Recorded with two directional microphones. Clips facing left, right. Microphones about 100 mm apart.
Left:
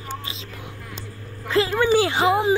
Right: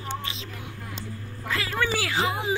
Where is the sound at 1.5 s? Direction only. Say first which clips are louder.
Left 9 dB; 25° left (ahead or behind).